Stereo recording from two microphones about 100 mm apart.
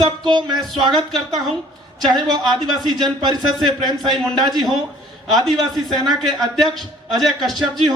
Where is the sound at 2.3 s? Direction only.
45° right (ahead or behind).